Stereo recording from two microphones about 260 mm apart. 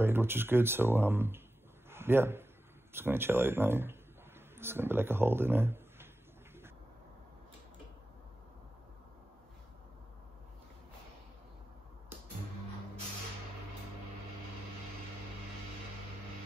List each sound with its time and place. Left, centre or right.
0.0 s a man's voice: centre